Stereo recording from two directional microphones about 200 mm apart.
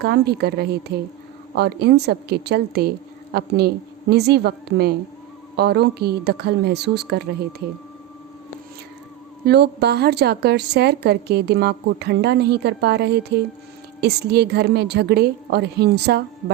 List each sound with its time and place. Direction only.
0.0 s a woman's voice: 55° right (ahead or behind)
9.5 s a woman's voice: 55° right (ahead or behind)